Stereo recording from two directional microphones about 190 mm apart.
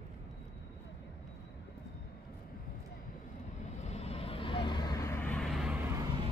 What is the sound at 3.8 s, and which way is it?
Vehicle, 35° left (ahead or behind).